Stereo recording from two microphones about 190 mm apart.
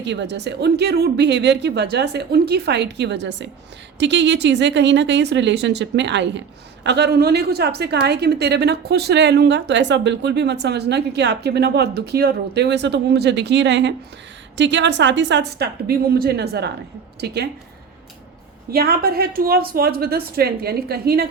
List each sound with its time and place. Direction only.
0.0 s a woman's voice: 65° right (ahead or behind)
18.7 s a woman's voice: 50° right (ahead or behind)